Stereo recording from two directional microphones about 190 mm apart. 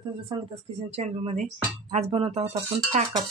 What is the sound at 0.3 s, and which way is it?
Speech, 25° right (ahead or behind).